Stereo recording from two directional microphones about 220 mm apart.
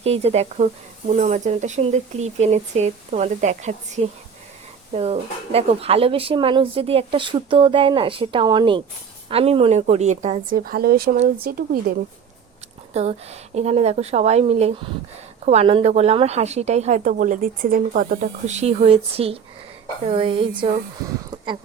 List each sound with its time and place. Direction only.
0.0 s a woman's voice: 30° right (ahead or behind)
12.9 s a woman's voice: 30° right (ahead or behind)